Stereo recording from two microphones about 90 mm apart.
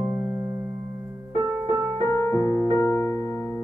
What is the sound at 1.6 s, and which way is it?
Music, 35° right (ahead or behind).